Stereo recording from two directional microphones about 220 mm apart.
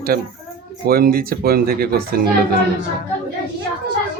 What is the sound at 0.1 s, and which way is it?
Speech, 45° right (ahead or behind).